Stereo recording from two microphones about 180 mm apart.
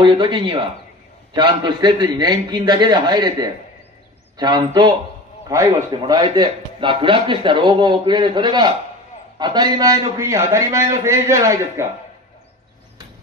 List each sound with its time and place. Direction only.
0.0 s a man's voice: 25° right (ahead or behind)